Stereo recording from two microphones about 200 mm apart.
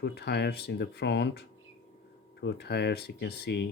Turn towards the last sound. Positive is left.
turn(degrees=55)  # may be behind; listen again after turning